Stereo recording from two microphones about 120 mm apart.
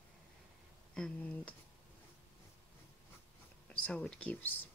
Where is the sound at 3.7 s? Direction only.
10° left (ahead or behind).